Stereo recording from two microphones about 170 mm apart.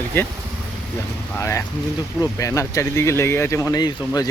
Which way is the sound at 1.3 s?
15° left (ahead or behind).